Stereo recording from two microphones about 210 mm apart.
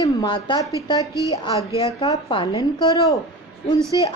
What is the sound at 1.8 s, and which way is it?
A woman's voice, 20° left (ahead or behind).